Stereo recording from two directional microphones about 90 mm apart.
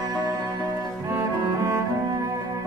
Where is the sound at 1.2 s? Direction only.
35° right (ahead or behind).